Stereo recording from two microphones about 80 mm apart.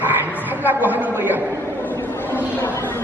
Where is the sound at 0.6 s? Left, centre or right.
Right.